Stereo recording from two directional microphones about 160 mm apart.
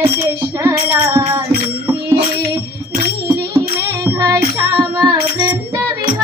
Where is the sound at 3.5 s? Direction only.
20° right (ahead or behind).